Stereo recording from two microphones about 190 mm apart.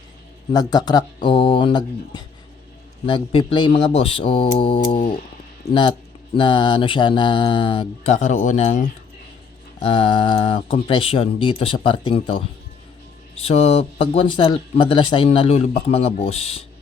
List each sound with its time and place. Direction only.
0.5 s speech: 20° left (ahead or behind)
8.3 s speech: 40° left (ahead or behind)
9.8 s speech: 25° left (ahead or behind)
13.5 s speech: 35° left (ahead or behind)